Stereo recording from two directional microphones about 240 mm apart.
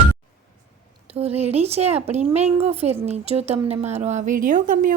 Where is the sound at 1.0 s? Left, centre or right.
Right.